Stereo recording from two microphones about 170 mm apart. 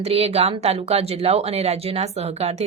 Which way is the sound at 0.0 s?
35° right (ahead or behind).